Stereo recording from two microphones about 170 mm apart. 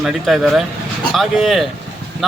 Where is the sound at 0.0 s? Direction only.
Centre (ahead or behind).